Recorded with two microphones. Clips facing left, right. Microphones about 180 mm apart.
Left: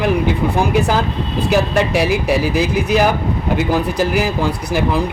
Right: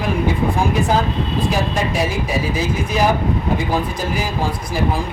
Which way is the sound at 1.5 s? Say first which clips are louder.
Left 5 dB; 70° left (ahead or behind).